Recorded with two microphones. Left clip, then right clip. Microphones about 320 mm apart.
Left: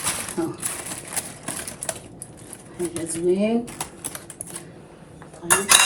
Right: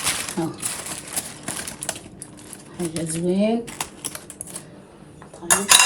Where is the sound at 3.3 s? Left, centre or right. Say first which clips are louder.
Right 1 dB; right.